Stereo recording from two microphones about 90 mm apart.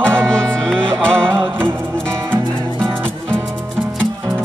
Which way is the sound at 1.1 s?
25° right (ahead or behind).